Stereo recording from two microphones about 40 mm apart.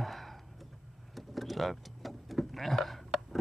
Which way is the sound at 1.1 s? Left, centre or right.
Centre.